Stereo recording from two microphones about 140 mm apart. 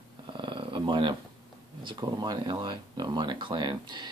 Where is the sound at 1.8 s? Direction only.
35° right (ahead or behind).